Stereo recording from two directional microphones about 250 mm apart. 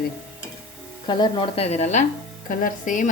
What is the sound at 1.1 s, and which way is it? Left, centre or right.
A woman's voice, centre.